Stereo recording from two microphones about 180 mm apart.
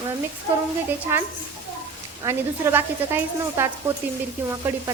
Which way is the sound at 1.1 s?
15° right (ahead or behind).